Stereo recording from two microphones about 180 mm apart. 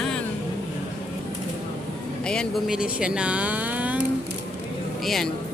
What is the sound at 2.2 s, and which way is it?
Speech, 5° left (ahead or behind).